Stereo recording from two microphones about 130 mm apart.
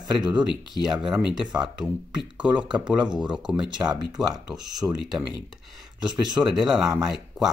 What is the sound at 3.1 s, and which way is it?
Speech, 5° right (ahead or behind).